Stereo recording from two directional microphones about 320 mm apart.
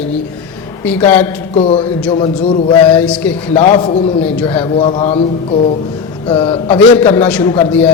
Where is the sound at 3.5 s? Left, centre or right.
Centre.